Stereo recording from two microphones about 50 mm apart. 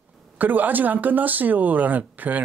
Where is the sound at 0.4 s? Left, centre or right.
Right.